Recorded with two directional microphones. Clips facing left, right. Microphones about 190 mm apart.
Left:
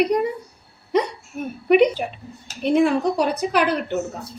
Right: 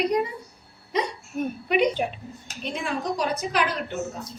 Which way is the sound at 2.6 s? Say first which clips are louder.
Left 11 dB; 60° left (ahead or behind).